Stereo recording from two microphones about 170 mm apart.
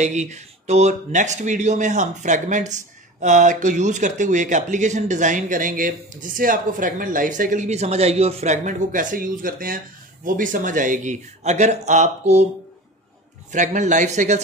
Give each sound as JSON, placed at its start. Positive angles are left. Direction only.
{"t": 0.0, "sound": "speech", "side_deg": -45}
{"t": 13.5, "sound": "speech", "side_deg": -45}